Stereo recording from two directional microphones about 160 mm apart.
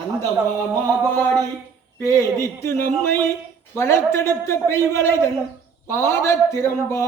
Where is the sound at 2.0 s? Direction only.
20° left (ahead or behind).